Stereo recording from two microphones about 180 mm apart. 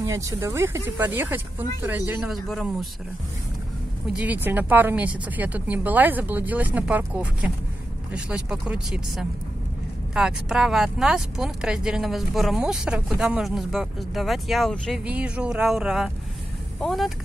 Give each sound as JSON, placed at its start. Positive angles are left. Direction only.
{"t": 0.0, "sound": "speech", "side_deg": -20}
{"t": 4.1, "sound": "speech", "side_deg": -10}